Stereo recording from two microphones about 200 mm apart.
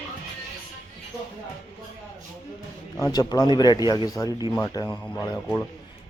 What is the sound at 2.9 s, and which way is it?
Speech, 20° left (ahead or behind).